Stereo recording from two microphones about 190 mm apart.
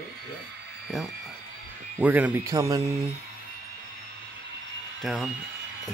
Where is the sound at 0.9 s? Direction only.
Centre (ahead or behind); by 2.8 s 20° right (ahead or behind).